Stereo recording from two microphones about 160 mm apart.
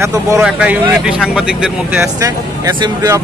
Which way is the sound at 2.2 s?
20° right (ahead or behind).